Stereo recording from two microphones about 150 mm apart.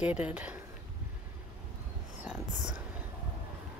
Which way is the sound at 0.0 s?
10° right (ahead or behind).